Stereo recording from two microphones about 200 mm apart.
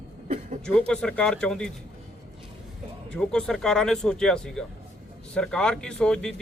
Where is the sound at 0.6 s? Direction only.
5° left (ahead or behind).